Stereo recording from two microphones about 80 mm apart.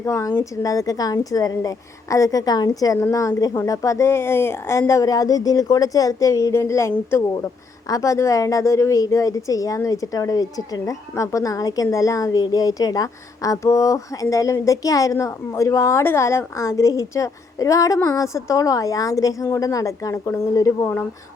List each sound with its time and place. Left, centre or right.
0.0 s a woman's voice: left
11.1 s a woman's voice: left